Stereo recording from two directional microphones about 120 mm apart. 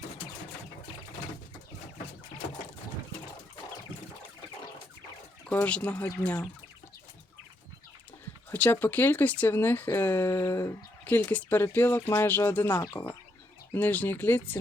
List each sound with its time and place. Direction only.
5.5 s speech: 10° left (ahead or behind)
8.4 s speech: 15° left (ahead or behind)